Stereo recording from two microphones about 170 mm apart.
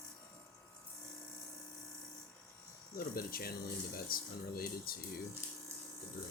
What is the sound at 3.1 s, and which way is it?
Speech, 60° left (ahead or behind).